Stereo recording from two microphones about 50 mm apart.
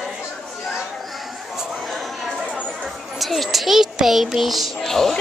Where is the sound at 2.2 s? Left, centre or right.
Centre.